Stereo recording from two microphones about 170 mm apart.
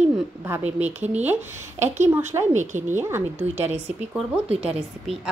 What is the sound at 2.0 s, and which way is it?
Speech, 15° right (ahead or behind).